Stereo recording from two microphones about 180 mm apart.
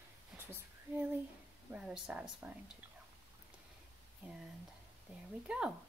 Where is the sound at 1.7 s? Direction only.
5° right (ahead or behind).